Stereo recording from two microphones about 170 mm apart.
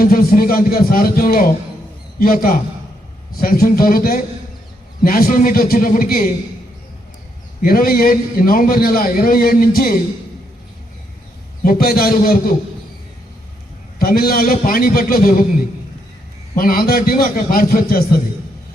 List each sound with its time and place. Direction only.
0.0 s a man's voice: 60° left (ahead or behind)
7.6 s a man's voice: 60° left (ahead or behind)
11.6 s a man's voice: 60° left (ahead or behind)
14.0 s a man's voice: 60° left (ahead or behind)
16.6 s a man's voice: 60° left (ahead or behind)